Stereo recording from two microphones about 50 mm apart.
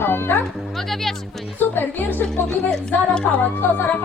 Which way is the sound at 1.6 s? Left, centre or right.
Left.